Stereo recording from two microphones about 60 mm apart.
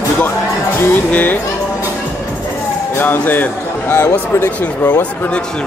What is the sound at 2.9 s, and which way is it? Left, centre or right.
Speech, left.